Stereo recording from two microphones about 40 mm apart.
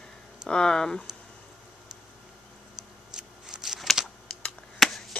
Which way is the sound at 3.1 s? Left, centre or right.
Centre.